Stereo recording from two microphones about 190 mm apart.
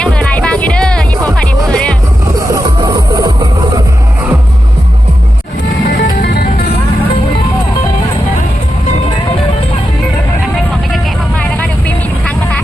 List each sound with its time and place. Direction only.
0.0 s music: 5° left (ahead or behind)
2.5 s music: 20° right (ahead or behind)
5.9 s music: 55° left (ahead or behind)
10.9 s vehicle: 5° left (ahead or behind)